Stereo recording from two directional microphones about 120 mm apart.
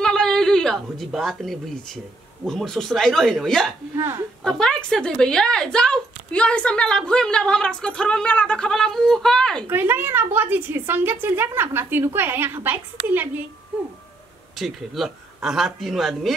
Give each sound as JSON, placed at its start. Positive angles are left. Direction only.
{"t": 0.0, "sound": "a woman's voice", "side_deg": 5}
{"t": 3.9, "sound": "speech", "side_deg": -25}
{"t": 4.4, "sound": "a woman's voice", "side_deg": 5}
{"t": 9.7, "sound": "a woman's voice", "side_deg": -15}
{"t": 14.6, "sound": "speech", "side_deg": 0}